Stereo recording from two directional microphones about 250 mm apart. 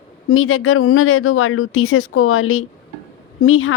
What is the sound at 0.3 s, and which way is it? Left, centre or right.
Speech, left.